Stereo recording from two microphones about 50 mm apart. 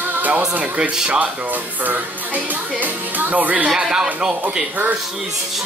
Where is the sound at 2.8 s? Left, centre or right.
Right.